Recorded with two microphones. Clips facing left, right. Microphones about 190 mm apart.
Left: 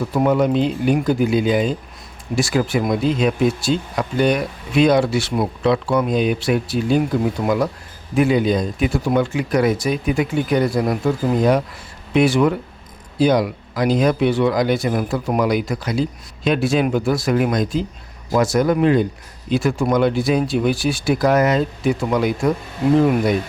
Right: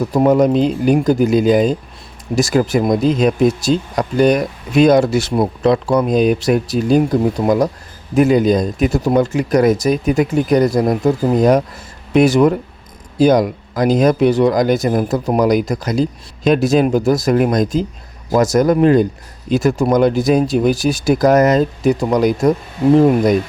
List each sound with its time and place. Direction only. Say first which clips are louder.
0.1 s speech: right 5 dB; 40° right (ahead or behind)